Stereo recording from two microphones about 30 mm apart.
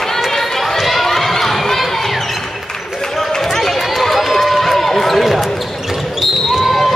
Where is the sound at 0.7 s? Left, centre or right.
Centre.